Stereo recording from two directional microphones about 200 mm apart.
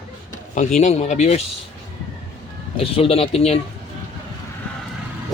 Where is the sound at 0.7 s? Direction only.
35° left (ahead or behind).